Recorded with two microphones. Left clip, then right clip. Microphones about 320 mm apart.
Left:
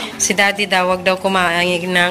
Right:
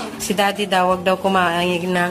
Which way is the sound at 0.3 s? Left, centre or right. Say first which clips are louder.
Left 3 dB; centre.